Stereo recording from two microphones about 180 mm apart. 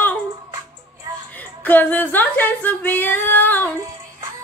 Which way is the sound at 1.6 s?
10° left (ahead or behind).